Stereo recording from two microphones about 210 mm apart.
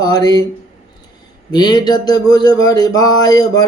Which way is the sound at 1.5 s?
20° left (ahead or behind).